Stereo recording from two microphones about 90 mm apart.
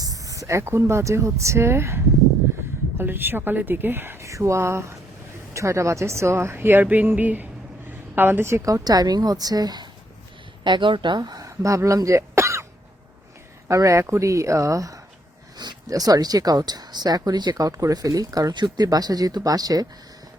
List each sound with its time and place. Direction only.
0.0 s speech: 40° right (ahead or behind)
3.0 s a woman's voice: 25° right (ahead or behind)
4.2 s a woman's voice: 35° right (ahead or behind)
10.6 s speech: 60° right (ahead or behind); by 12.6 s 35° right (ahead or behind)
13.7 s speech: 35° right (ahead or behind)
15.5 s speech: 50° right (ahead or behind)